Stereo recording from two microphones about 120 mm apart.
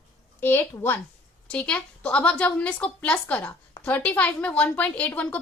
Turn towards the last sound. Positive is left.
turn(degrees=15)  # may be behind; listen again after turning